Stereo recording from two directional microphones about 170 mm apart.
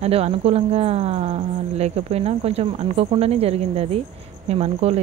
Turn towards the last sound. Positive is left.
turn(degrees=-40)  # may be behind; listen again after turning